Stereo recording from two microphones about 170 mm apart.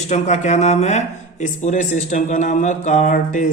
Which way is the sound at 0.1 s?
40° left (ahead or behind).